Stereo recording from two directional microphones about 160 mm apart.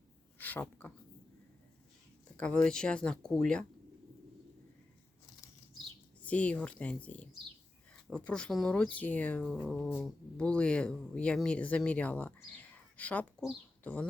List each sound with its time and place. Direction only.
0.3 s a sound: 10° left (ahead or behind)
2.3 s speech: 5° left (ahead or behind)
6.2 s speech: 10° left (ahead or behind)